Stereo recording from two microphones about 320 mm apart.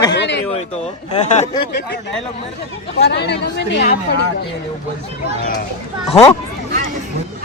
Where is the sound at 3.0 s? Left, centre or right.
Left.